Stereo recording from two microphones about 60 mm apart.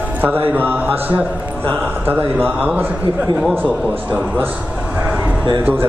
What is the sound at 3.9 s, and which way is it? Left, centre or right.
A man's voice, right.